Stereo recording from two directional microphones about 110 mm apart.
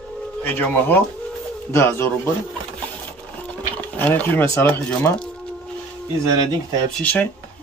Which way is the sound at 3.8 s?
15° left (ahead or behind).